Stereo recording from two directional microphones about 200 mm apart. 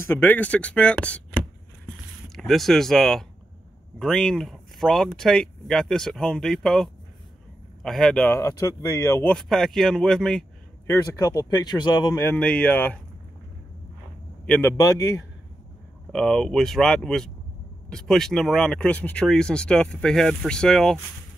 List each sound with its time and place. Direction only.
0.0 s speech: 10° left (ahead or behind)
2.2 s speech: centre (ahead or behind)
10.9 s speech: 15° left (ahead or behind)
14.4 s a man's voice: 5° left (ahead or behind)
14.8 s speech: 15° left (ahead or behind)
16.1 s speech: 5° left (ahead or behind)